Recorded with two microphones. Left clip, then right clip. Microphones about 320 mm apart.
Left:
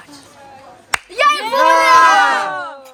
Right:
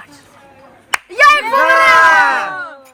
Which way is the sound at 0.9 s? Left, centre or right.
Centre.